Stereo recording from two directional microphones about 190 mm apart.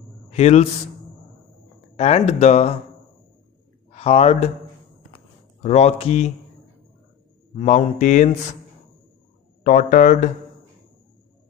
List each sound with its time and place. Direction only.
0.3 s a man's voice: 35° left (ahead or behind)
2.0 s speech: 35° left (ahead or behind)
3.9 s speech: 30° left (ahead or behind)
5.6 s speech: 35° left (ahead or behind)
7.5 s speech: 35° left (ahead or behind)
9.6 s speech: 45° left (ahead or behind)